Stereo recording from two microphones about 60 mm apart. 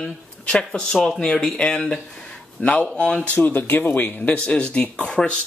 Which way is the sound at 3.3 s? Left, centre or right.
Left.